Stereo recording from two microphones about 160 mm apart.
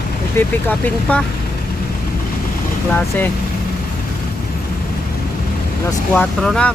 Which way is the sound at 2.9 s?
10° left (ahead or behind).